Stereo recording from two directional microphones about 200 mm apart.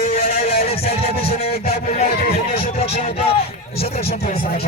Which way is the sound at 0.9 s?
50° left (ahead or behind).